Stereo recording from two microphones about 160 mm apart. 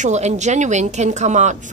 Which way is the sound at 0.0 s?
45° right (ahead or behind).